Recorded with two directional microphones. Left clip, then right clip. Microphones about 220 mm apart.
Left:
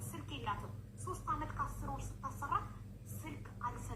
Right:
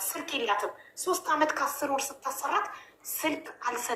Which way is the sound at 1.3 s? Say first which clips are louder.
Right 14 dB; 40° right (ahead or behind).